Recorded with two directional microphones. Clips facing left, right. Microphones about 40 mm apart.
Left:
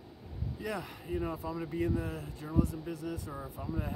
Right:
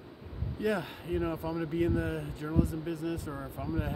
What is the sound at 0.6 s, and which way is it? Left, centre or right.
Speech, right.